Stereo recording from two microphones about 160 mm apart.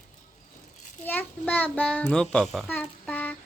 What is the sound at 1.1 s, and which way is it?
A child's voice, 10° left (ahead or behind).